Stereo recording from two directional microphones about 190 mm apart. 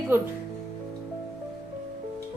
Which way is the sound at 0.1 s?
10° right (ahead or behind).